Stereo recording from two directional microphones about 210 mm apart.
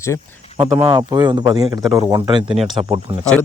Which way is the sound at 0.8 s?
20° right (ahead or behind).